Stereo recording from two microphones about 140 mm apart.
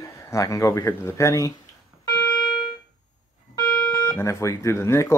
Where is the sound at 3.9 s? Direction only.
15° left (ahead or behind).